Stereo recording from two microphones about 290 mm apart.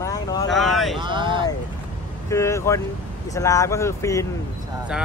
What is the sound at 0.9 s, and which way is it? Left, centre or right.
Speech, centre.